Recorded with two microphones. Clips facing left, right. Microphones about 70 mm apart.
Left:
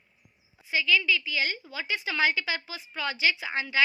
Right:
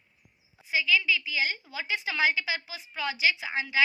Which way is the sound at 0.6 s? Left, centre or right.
Centre.